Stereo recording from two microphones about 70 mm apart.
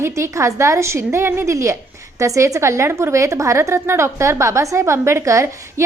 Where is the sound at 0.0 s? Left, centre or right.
Right.